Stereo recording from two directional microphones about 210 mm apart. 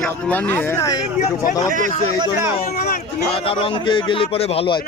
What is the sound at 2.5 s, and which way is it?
Speech, 30° left (ahead or behind).